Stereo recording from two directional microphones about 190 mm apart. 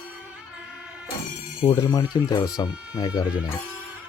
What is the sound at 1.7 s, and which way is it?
Speech, 20° left (ahead or behind).